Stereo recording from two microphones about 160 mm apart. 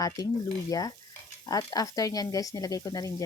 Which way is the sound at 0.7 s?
20° left (ahead or behind).